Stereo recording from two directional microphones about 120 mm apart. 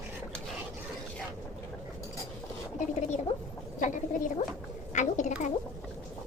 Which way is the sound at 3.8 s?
90° left.